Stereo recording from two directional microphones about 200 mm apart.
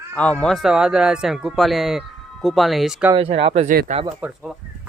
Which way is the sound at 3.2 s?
30° right (ahead or behind).